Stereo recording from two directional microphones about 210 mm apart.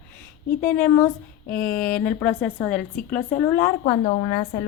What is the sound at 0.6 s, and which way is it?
Speech, 10° left (ahead or behind).